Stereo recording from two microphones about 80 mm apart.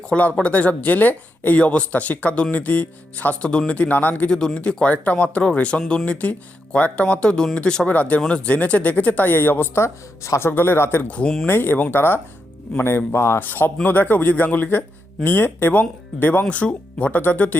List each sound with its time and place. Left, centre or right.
0.1 s speech: centre
4.3 s speech: centre; by 11.0 s left
11.1 s speech: centre
11.4 s speech: left
13.4 s speech: left